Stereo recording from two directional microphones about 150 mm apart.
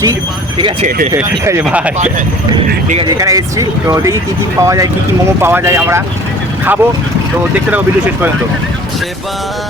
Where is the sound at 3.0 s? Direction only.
25° right (ahead or behind).